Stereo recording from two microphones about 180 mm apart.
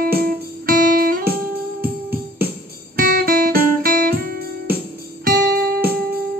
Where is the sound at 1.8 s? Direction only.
10° right (ahead or behind).